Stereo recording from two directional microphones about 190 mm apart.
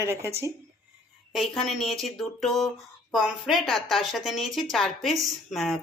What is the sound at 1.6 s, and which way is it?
Speech, centre (ahead or behind).